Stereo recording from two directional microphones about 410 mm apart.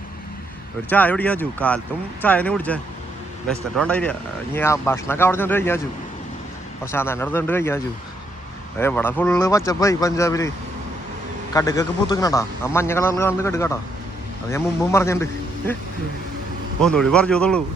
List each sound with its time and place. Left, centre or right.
0.9 s speech: centre
6.9 s speech: centre
8.8 s a man's voice: centre
11.5 s a man's voice: centre
16.8 s speech: centre